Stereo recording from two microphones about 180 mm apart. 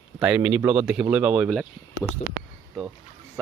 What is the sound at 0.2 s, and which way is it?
Speech, 5° right (ahead or behind).